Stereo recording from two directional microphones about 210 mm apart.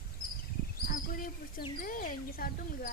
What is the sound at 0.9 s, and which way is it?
Bird, 40° left (ahead or behind).